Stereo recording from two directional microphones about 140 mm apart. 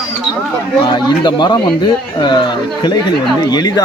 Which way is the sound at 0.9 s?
30° left (ahead or behind).